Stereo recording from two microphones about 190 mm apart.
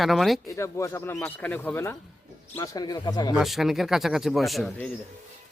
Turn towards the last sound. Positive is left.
turn(degrees=0)  # may be behind; listen again after turning